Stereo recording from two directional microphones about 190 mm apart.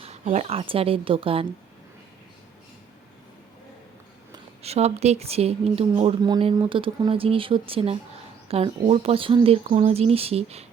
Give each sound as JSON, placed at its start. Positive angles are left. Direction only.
{"t": 0.0, "sound": "speech", "side_deg": -35}
{"t": 4.6, "sound": "speech", "side_deg": -35}